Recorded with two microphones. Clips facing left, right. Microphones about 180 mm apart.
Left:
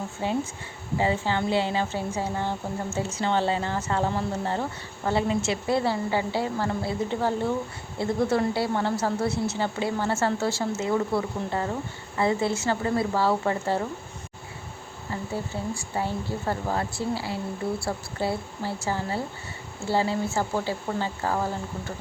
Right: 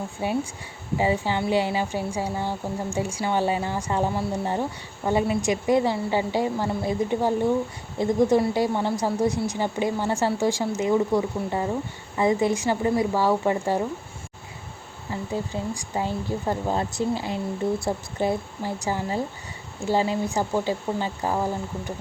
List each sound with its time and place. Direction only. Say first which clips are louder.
0.2 s a woman's voice: right 1 dB; 15° right (ahead or behind)
15.1 s a woman's voice: right 3 dB; 15° right (ahead or behind)